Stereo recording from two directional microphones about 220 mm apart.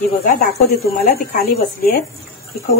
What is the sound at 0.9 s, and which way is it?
Speech, 40° left (ahead or behind).